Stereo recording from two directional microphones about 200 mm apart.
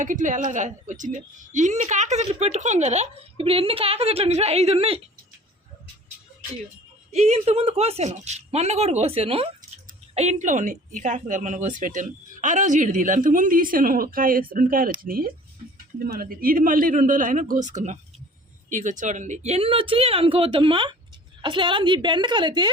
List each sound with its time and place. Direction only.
0.0 s speech: 40° right (ahead or behind)
7.1 s a man's voice: 35° right (ahead or behind)